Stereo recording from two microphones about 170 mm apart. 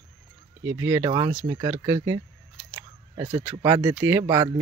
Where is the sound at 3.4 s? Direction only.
15° right (ahead or behind).